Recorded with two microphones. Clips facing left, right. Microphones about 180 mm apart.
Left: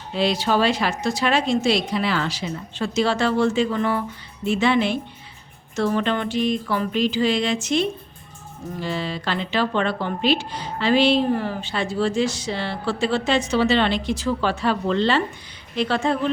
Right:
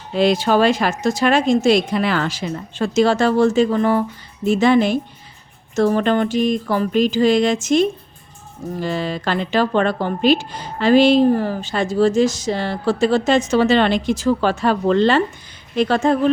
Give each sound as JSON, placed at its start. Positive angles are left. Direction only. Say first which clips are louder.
{"t": 0.2, "sound": "speech", "louder": "right 5 dB", "side_deg": -50}